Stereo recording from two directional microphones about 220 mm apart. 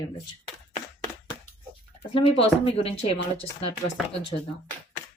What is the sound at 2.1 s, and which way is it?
Speech, 25° left (ahead or behind).